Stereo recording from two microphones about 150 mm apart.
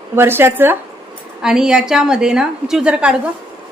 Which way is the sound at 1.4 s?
5° right (ahead or behind).